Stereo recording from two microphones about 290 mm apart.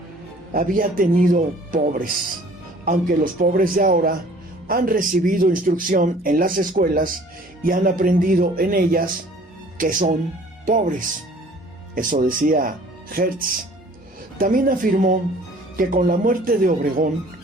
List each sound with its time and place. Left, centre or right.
0.5 s speech: right
11.9 s speech: right